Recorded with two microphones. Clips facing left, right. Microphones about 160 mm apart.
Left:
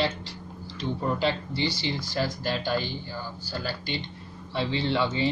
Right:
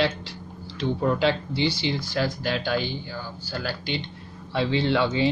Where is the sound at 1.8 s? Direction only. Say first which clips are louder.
Right 3 dB; 65° right (ahead or behind).